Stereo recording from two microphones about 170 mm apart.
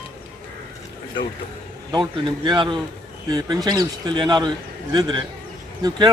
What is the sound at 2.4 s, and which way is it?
Speech, 25° right (ahead or behind).